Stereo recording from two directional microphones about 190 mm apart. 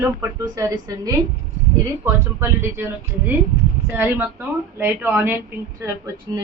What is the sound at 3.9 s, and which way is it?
A woman's voice, 10° right (ahead or behind).